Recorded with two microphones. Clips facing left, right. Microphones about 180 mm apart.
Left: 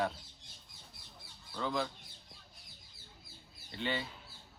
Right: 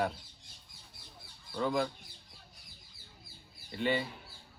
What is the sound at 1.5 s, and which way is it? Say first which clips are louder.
Speech: right 5 dB; 10° right (ahead or behind).